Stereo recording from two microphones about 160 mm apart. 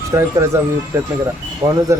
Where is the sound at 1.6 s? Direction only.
25° right (ahead or behind).